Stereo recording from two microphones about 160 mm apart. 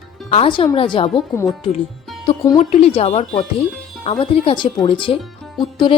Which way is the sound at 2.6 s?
40° left (ahead or behind).